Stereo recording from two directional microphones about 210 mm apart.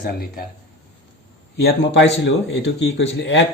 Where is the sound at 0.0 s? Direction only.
45° left (ahead or behind).